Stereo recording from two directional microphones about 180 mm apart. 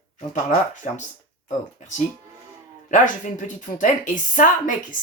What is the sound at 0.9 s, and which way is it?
Speech, 45° left (ahead or behind).